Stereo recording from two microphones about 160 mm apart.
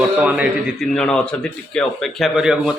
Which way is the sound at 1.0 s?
5° left (ahead or behind).